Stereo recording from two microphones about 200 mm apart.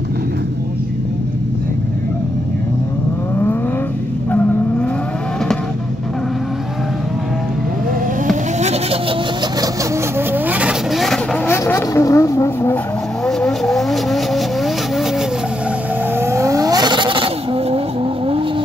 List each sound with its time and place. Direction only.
4.3 s vehicle: 10° left (ahead or behind)
8.3 s vehicle: 35° right (ahead or behind)
10.1 s vehicle: 10° right (ahead or behind)
11.4 s vehicle: 15° left (ahead or behind)
13.2 s vehicle: 5° left (ahead or behind)
16.2 s vehicle: 15° right (ahead or behind); by 18.4 s 30° right (ahead or behind)